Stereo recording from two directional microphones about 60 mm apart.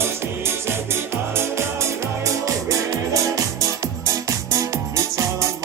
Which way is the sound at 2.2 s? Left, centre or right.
Right.